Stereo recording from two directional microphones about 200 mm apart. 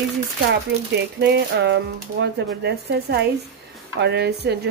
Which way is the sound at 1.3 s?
55° right (ahead or behind).